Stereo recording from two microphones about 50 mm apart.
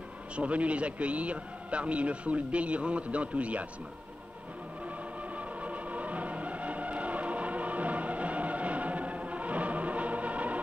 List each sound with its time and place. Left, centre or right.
0.4 s a man's voice: right
5.6 s music: right